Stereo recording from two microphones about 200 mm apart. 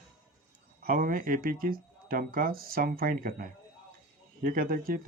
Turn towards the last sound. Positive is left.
turn(degrees=-45)  # may be behind; listen again after turning